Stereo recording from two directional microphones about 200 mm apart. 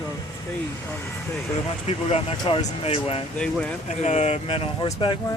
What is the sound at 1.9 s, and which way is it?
Speech, 30° left (ahead or behind).